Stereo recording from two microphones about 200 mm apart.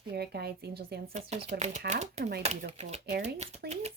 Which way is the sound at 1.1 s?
30° right (ahead or behind).